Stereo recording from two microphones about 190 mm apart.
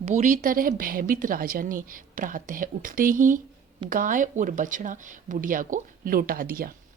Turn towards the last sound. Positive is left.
turn(degrees=-50)  # may be behind; listen again after turning